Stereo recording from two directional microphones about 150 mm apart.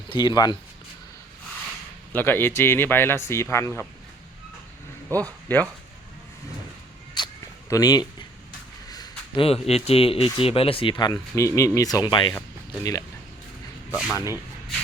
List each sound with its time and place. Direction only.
0.1 s speech: 30° left (ahead or behind)
2.1 s speech: 15° left (ahead or behind)
5.5 s speech: 10° left (ahead or behind)
7.2 s a sound: 30° left (ahead or behind)
7.7 s speech: 25° left (ahead or behind)
8.9 s a sound: 25° left (ahead or behind)
9.4 s speech: 40° left (ahead or behind); by 13.1 s 20° left (ahead or behind)
13.9 s speech: 5° right (ahead or behind)